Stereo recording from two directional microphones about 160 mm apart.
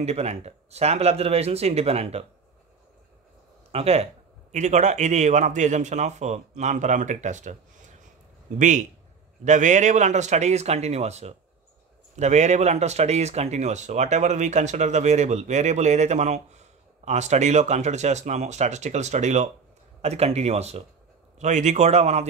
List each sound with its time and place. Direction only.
0.0 s speech: 40° right (ahead or behind)
3.7 s speech: 40° right (ahead or behind)